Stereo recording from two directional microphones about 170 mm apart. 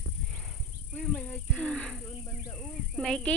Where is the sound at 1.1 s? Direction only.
10° left (ahead or behind).